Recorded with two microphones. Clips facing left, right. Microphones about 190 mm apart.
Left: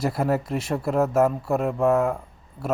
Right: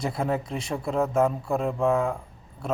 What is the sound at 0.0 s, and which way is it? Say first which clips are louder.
Speech: left 4 dB; 5° left (ahead or behind).